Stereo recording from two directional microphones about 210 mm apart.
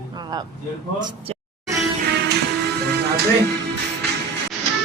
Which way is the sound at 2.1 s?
55° right (ahead or behind).